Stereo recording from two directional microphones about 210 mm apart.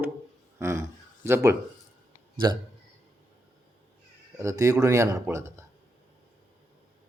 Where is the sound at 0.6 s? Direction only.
15° right (ahead or behind).